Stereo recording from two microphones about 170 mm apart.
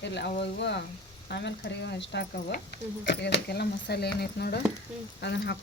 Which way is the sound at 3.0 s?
85° left.